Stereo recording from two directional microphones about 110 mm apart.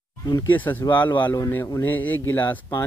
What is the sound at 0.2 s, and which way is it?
Speech, 35° left (ahead or behind).